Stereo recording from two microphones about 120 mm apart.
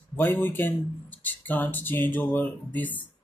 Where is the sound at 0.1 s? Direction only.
15° left (ahead or behind).